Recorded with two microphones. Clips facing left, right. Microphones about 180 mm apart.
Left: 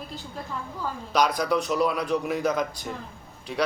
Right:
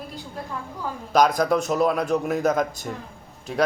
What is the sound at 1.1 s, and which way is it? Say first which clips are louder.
Speech: right 4 dB; 45° right (ahead or behind).